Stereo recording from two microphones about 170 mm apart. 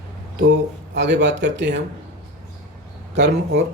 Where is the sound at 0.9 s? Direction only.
90° right.